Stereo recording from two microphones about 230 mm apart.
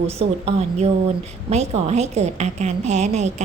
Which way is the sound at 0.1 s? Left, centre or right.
Right.